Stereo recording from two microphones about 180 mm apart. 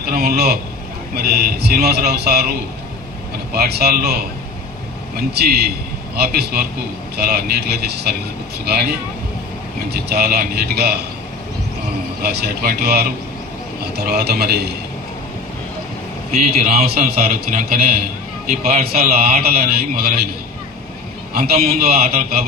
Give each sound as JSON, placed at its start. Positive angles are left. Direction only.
{"t": 0.1, "sound": "a man's voice", "side_deg": -60}
{"t": 3.5, "sound": "speech", "side_deg": -60}
{"t": 5.3, "sound": "speech", "side_deg": -65}
{"t": 9.9, "sound": "speech", "side_deg": -65}
{"t": 12.2, "sound": "speech", "side_deg": -60}
{"t": 16.3, "sound": "a man's voice", "side_deg": -40}
{"t": 19.3, "sound": "speech", "side_deg": -55}
{"t": 21.5, "sound": "a man's voice", "side_deg": -40}